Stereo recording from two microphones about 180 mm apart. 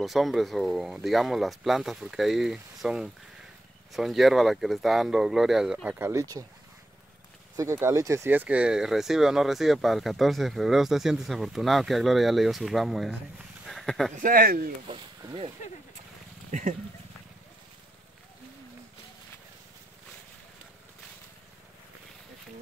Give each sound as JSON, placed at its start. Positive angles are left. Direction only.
{"t": 0.0, "sound": "speech", "side_deg": 0}
{"t": 7.5, "sound": "speech", "side_deg": -15}
{"t": 14.1, "sound": "speech", "side_deg": -50}
{"t": 15.2, "sound": "speech", "side_deg": -25}